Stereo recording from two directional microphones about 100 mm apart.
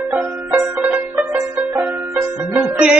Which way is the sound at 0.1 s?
20° right (ahead or behind).